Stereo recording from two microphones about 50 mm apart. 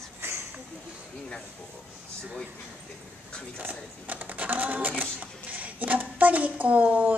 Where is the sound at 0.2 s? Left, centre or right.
Right.